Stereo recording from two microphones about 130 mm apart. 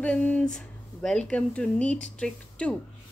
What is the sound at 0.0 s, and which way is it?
A woman's voice, 10° left (ahead or behind).